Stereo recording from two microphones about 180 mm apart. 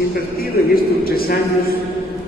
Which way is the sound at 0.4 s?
55° left (ahead or behind).